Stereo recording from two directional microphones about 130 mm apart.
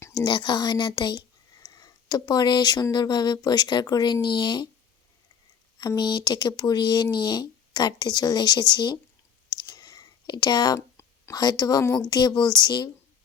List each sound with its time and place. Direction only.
0.1 s speech: 35° left (ahead or behind)
5.8 s speech: 30° left (ahead or behind)
9.5 s clicking: 30° left (ahead or behind)
10.8 s speech: 20° left (ahead or behind)